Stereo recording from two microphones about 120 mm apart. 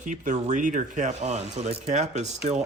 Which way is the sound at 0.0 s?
90° right.